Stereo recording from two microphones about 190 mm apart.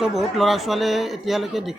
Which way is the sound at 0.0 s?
Centre (ahead or behind).